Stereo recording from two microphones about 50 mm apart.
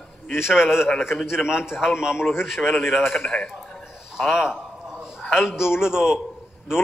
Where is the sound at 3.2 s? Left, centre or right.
Left.